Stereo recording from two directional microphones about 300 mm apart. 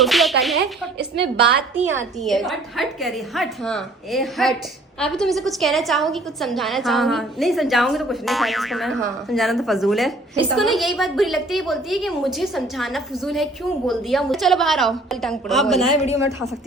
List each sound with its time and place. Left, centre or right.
0.0 s a woman's voice: centre
0.9 s a woman's voice: right
1.9 s a woman's voice: centre